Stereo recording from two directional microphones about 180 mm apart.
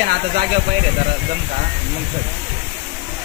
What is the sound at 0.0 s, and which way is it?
Speech, 50° right (ahead or behind).